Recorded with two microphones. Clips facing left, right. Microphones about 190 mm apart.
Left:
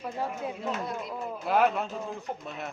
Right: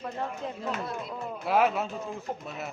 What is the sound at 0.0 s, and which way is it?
Speech, 5° left (ahead or behind).